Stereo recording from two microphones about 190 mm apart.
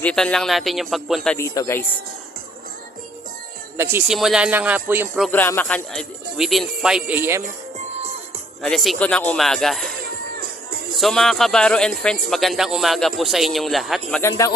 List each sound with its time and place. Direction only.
0.0 s speech: 5° left (ahead or behind)
1.4 s speech: 15° left (ahead or behind)
3.9 s speech: centre (ahead or behind)
5.3 s speech: 10° left (ahead or behind); by 7.4 s 10° right (ahead or behind)
8.6 s speech: centre (ahead or behind)
10.9 s speech: centre (ahead or behind)
14.1 s speech: 15° left (ahead or behind)